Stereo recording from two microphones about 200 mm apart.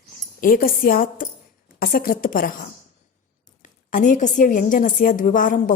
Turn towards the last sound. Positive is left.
turn(degrees=40)  # may be behind; listen again after turning